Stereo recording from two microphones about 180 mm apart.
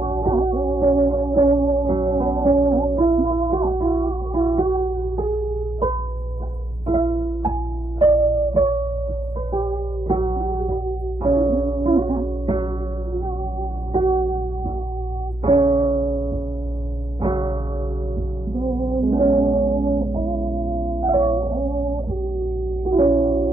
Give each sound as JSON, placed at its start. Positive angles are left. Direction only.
{"t": 0.0, "sound": "music", "side_deg": -30}
{"t": 7.0, "sound": "music", "side_deg": -25}
{"t": 9.5, "sound": "music", "side_deg": -30}
{"t": 13.9, "sound": "music", "side_deg": -30}
{"t": 15.4, "sound": "music", "side_deg": -30}
{"t": 18.6, "sound": "music", "side_deg": -30}
{"t": 22.8, "sound": "music", "side_deg": -30}